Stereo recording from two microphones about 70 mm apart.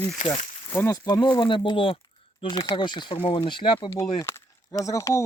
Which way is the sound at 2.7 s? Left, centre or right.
Left.